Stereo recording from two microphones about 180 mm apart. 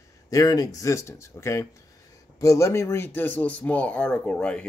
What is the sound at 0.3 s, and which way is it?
Speech, 20° left (ahead or behind).